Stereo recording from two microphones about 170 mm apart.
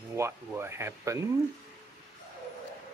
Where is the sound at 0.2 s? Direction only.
15° right (ahead or behind).